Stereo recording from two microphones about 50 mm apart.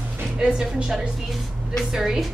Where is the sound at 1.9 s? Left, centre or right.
Centre.